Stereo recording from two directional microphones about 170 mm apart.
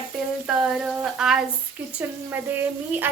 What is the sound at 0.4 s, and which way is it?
Frying, 5° right (ahead or behind).